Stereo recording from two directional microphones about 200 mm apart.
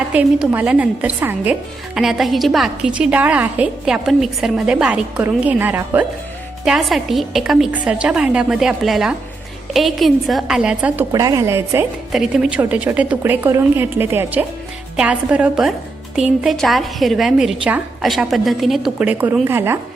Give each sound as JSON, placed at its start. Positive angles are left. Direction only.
{"t": 0.1, "sound": "a woman's voice", "side_deg": -10}
{"t": 11.1, "sound": "a woman's voice", "side_deg": -20}